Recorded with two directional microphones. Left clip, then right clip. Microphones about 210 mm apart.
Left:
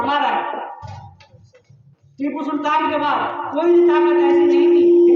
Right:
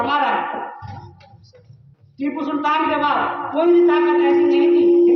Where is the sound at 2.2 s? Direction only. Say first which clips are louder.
Even; centre (ahead or behind).